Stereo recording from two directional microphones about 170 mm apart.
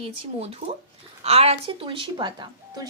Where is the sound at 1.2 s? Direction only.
35° right (ahead or behind).